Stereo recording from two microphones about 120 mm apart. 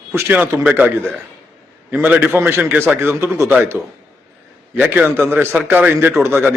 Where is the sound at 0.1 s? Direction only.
15° right (ahead or behind).